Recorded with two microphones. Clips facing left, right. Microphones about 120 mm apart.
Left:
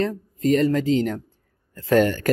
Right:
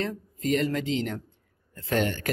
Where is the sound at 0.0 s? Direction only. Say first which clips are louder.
Left 7 dB; 40° left (ahead or behind).